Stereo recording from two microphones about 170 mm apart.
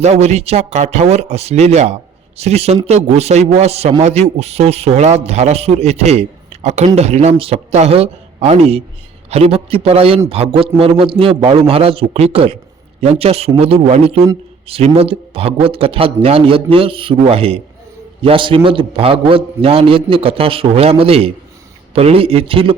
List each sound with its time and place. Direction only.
0.0 s a man's voice: 40° right (ahead or behind)